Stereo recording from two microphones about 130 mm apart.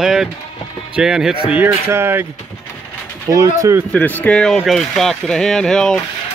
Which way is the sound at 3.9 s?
15° left (ahead or behind).